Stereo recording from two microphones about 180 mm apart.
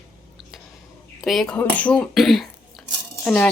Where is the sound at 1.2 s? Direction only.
Centre (ahead or behind).